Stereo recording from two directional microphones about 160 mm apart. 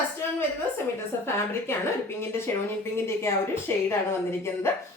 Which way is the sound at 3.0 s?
15° left (ahead or behind).